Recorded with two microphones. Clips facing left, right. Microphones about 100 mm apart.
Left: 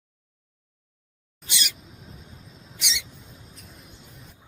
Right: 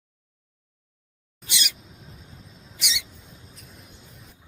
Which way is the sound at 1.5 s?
35° left (ahead or behind).